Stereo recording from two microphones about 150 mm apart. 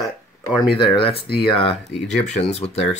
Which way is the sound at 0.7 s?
35° left (ahead or behind).